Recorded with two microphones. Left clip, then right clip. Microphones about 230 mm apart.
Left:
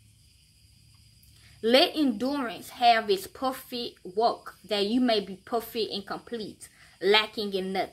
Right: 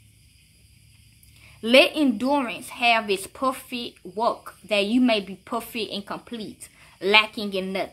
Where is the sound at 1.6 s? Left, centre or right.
Centre.